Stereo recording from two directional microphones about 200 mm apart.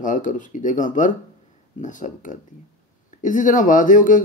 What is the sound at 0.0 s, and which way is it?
Speech, 40° left (ahead or behind).